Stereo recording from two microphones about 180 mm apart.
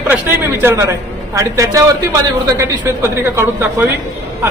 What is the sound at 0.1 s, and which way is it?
A man's voice, 10° right (ahead or behind).